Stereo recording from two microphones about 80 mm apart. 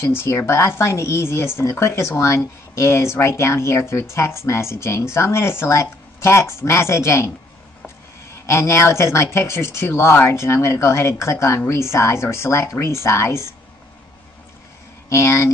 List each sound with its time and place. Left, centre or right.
0.1 s speech: left
8.5 s speech: left
15.0 s speech: left